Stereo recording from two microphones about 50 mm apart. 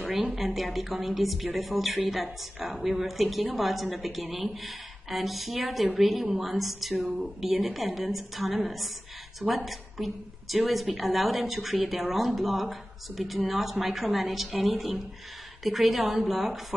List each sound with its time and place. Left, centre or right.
0.0 s speech: right
0.4 s a woman's voice: centre